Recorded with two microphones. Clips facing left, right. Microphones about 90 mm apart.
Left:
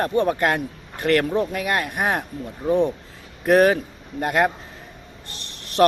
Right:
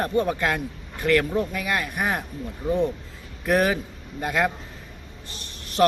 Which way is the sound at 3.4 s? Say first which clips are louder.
Left 6 dB; 50° left (ahead or behind).